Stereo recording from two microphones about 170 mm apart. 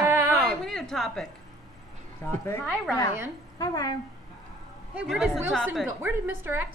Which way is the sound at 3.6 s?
20° left (ahead or behind).